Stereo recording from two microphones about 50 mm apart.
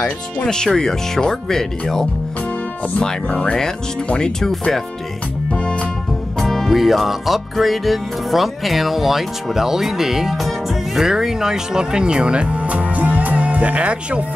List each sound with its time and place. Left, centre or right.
0.4 s speech: centre
5.5 s music: left
6.4 s music: centre; by 14.2 s right